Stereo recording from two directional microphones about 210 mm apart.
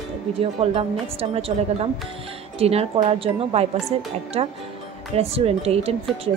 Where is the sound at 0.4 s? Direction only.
30° right (ahead or behind).